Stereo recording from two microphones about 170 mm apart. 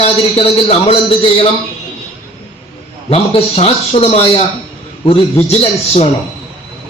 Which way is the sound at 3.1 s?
35° left (ahead or behind).